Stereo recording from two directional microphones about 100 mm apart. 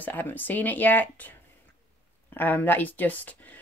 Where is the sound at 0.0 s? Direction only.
20° left (ahead or behind).